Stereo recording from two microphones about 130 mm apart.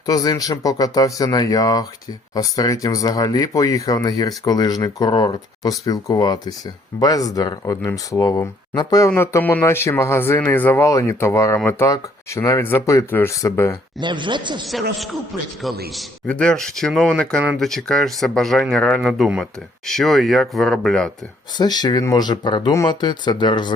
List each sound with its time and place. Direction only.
0.0 s speech: 30° left (ahead or behind)
14.0 s speech: 35° right (ahead or behind)
14.7 s speech: centre (ahead or behind)
21.6 s speech: 35° left (ahead or behind)